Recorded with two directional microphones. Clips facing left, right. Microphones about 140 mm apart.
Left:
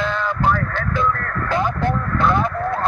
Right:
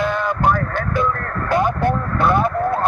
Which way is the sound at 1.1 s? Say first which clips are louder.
Even; 30° right (ahead or behind).